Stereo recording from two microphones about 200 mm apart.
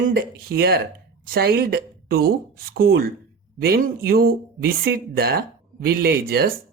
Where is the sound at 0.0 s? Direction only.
50° right (ahead or behind).